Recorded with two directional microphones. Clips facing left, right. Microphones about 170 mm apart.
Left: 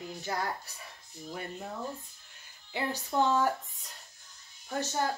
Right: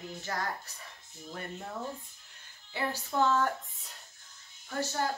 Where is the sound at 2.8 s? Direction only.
15° left (ahead or behind).